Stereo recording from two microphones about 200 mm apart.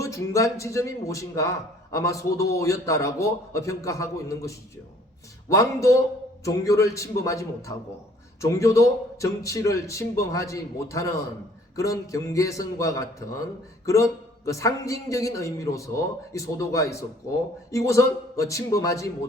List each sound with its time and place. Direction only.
0.0 s speech: 15° left (ahead or behind)